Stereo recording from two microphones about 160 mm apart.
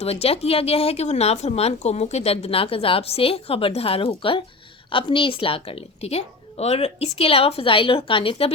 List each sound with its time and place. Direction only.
0.0 s speech: 40° left (ahead or behind)